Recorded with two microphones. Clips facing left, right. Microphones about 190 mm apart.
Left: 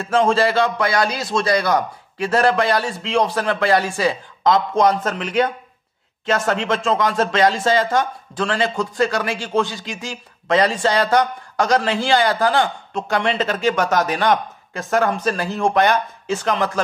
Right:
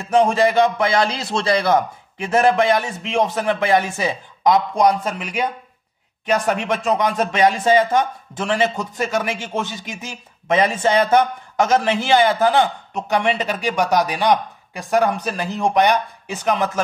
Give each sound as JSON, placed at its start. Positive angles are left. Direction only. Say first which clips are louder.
{"t": 0.0, "sound": "a man's voice", "louder": "right 1 dB", "side_deg": -20}